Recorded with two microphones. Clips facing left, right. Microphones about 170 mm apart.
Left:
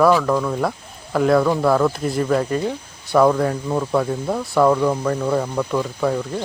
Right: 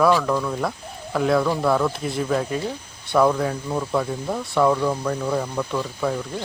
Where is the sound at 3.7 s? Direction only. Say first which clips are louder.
Left 4 dB; 15° left (ahead or behind).